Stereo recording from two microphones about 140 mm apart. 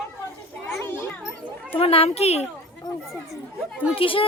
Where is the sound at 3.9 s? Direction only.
40° left (ahead or behind).